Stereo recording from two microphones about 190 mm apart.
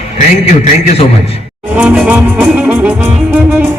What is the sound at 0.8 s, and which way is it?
Speech, 30° left (ahead or behind).